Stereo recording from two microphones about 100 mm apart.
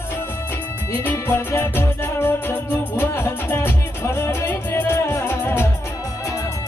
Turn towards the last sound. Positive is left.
turn(degrees=25)  # may be behind; listen again after turning